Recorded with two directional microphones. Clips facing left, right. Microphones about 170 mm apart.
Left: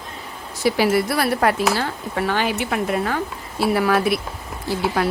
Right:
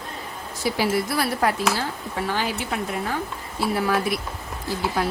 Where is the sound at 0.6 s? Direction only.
70° left (ahead or behind).